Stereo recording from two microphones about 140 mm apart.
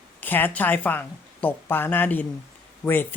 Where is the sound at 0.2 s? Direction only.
15° left (ahead or behind).